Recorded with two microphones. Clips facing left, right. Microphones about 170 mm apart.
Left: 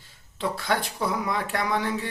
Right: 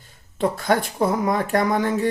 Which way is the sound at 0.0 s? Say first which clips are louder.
Right 7 dB; 45° right (ahead or behind).